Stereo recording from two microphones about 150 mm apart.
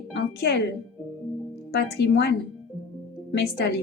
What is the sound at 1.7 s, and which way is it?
Speech, 90° left.